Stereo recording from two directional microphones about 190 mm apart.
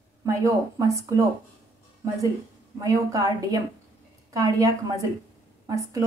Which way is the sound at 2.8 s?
20° right (ahead or behind).